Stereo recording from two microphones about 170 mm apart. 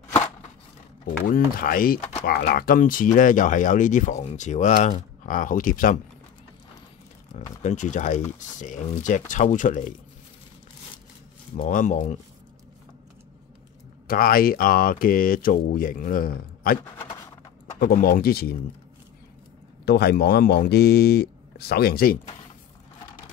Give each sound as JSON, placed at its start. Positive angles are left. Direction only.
{"t": 1.2, "sound": "speech", "side_deg": 55}
{"t": 7.6, "sound": "speech", "side_deg": 45}
{"t": 11.5, "sound": "speech", "side_deg": 50}
{"t": 14.0, "sound": "speech", "side_deg": 60}
{"t": 17.7, "sound": "speech", "side_deg": 60}
{"t": 19.8, "sound": "speech", "side_deg": 70}